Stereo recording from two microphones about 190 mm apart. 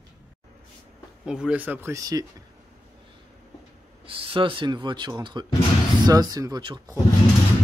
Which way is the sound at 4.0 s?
30° right (ahead or behind).